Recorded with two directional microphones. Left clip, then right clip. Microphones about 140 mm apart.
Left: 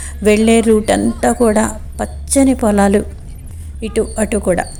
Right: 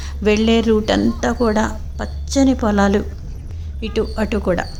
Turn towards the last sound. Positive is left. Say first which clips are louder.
# left 4 dB
turn(degrees=15)  # may be behind; listen again after turning